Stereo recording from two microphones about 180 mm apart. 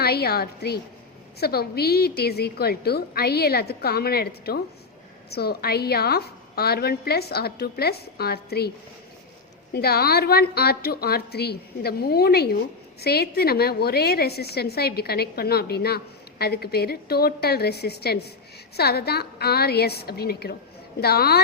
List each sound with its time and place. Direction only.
0.0 s a woman's voice: 60° left (ahead or behind)
9.7 s a woman's voice: 60° left (ahead or behind)